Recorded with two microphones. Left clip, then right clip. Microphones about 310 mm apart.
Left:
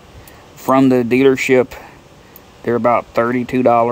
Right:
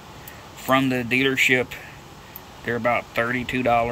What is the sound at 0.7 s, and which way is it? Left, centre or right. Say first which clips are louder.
Speech: left 8 dB; centre.